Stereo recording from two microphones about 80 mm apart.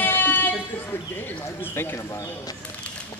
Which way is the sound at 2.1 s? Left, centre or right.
Left.